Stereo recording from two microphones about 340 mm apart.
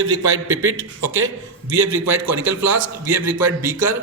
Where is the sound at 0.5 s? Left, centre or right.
Right.